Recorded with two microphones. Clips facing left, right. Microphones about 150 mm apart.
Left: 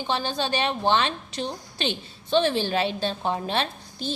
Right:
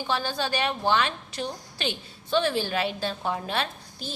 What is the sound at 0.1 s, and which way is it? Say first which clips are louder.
A woman's voice: left 2 dB; 20° left (ahead or behind).